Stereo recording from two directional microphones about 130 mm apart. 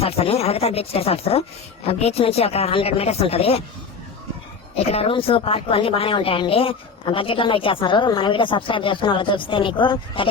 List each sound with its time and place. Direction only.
0.0 s speech: 50° left (ahead or behind)
4.8 s a woman's voice: 50° left (ahead or behind)